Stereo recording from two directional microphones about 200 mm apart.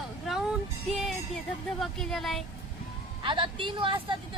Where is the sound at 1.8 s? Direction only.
Centre (ahead or behind).